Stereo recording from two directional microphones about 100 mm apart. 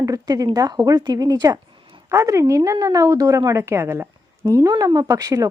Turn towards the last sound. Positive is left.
turn(degrees=-35)  # may be behind; listen again after turning